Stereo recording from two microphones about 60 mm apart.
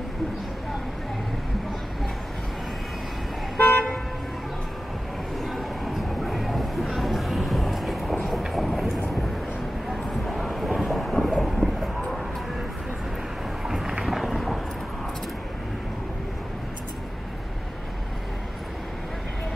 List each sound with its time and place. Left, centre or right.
3.5 s toot: left
5.4 s train: centre
8.6 s vehicle: centre
13.7 s thunder: centre